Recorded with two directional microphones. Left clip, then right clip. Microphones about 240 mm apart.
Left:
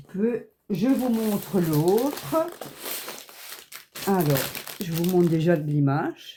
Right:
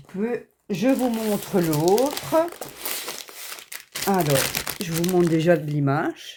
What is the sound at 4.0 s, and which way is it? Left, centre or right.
Crumpling, right.